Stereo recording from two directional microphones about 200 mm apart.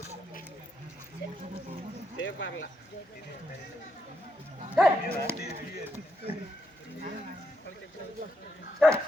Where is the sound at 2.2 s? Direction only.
70° left (ahead or behind).